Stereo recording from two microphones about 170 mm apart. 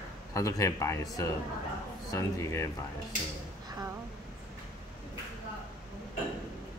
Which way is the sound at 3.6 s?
20° right (ahead or behind).